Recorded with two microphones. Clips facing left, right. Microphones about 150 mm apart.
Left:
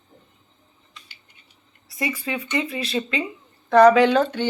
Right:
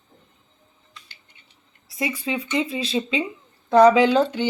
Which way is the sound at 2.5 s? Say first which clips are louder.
Right 1 dB; 20° right (ahead or behind).